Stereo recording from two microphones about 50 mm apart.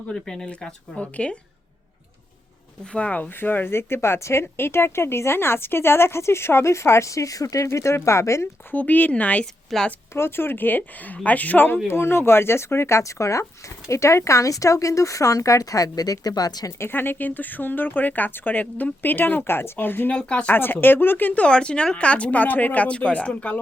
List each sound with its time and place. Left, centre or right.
0.1 s speech: centre
0.9 s a woman's voice: left
2.9 s speech: left
3.7 s a woman's voice: left
8.0 s speech: left
8.7 s speech: left
9.7 s a woman's voice: centre
10.2 s speech: left
11.9 s a woman's voice: left
13.8 s speech: left
16.9 s speech: left
20.1 s a woman's voice: left
20.5 s speech: left
21.3 s a woman's voice: left